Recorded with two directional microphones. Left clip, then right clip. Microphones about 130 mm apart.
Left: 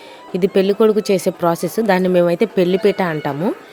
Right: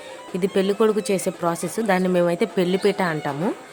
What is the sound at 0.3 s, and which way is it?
Speech, 30° left (ahead or behind).